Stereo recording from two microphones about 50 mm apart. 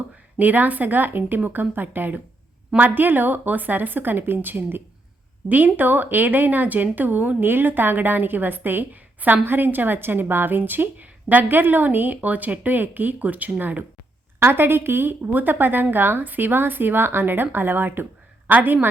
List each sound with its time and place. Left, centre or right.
0.3 s a woman's voice: right
14.3 s a woman's voice: right